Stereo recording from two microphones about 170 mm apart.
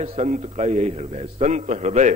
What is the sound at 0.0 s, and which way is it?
A man's voice, 40° right (ahead or behind).